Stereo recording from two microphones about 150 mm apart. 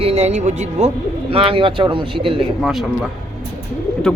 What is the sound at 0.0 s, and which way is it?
Speech, 45° right (ahead or behind).